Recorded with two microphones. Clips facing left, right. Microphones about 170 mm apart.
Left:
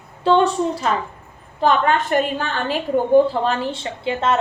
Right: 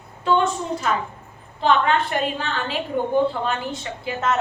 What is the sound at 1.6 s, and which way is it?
A woman's voice, 45° left (ahead or behind).